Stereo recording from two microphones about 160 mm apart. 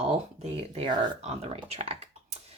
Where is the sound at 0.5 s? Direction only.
35° right (ahead or behind).